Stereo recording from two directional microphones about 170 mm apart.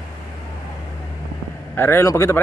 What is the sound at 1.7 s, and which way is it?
Speech, 15° left (ahead or behind).